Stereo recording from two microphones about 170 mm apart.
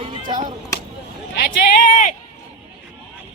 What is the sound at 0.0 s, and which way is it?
Chop, 30° right (ahead or behind).